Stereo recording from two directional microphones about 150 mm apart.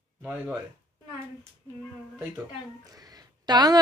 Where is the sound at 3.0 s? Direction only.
25° right (ahead or behind).